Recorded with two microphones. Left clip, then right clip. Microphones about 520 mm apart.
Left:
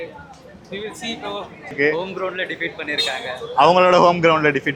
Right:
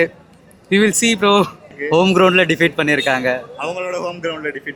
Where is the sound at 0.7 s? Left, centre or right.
Right.